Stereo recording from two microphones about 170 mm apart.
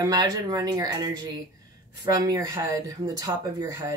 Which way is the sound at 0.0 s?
25° right (ahead or behind).